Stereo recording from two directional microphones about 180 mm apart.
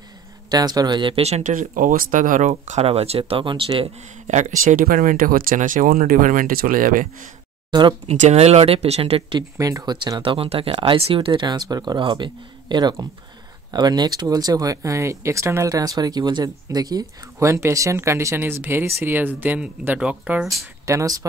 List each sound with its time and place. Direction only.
0.5 s speech: 20° right (ahead or behind); by 7.2 s 50° right (ahead or behind)
8.1 s speech: 35° right (ahead or behind)
9.6 s speech: 20° right (ahead or behind)
20.8 s speech: 20° right (ahead or behind)